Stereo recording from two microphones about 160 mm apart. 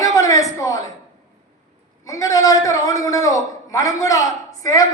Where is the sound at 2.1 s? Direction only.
20° left (ahead or behind).